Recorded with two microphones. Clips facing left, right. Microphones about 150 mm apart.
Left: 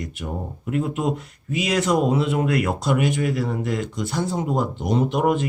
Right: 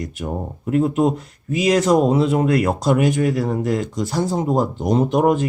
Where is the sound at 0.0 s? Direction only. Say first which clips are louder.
Right 4 dB; 40° right (ahead or behind).